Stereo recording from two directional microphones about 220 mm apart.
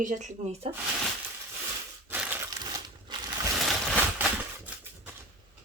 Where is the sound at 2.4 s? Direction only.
20° right (ahead or behind).